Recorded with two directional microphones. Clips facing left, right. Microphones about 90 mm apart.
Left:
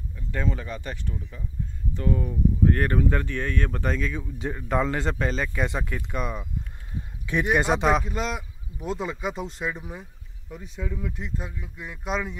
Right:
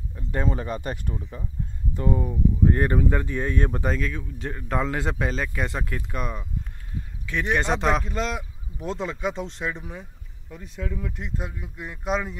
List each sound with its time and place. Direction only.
0.1 s speech: 35° right (ahead or behind)
1.2 s speech: 30° right (ahead or behind)
2.0 s speech: 20° right (ahead or behind)
3.8 s speech: centre (ahead or behind)
7.2 s speech: 10° left (ahead or behind)